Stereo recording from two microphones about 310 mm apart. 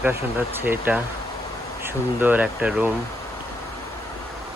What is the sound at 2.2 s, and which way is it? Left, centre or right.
Speech, centre.